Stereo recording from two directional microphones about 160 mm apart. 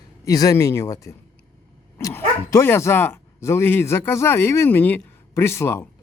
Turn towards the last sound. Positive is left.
turn(degrees=15)  # may be behind; listen again after turning